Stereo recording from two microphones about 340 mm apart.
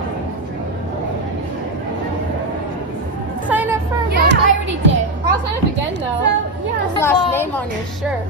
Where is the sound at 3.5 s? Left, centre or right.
Centre.